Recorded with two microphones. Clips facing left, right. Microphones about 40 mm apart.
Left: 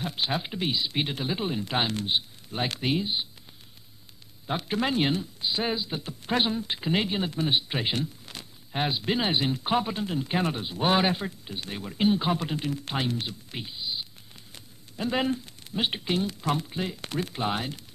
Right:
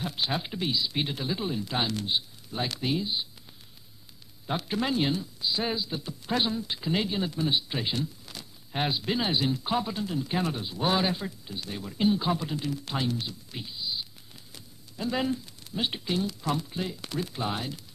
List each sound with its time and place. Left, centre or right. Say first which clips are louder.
0.0 s speech: left 1 dB; centre
0.6 s speech: left 1 dB; left
4.5 s speech: left 1 dB; centre
4.9 s speech: left 2 dB; left
5.6 s speech: left 3 dB; left
8.9 s speech: left 3 dB; left
9.3 s speech: left 2 dB; left